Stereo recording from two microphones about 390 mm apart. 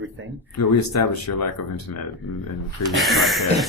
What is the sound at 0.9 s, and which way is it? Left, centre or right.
Speech, left.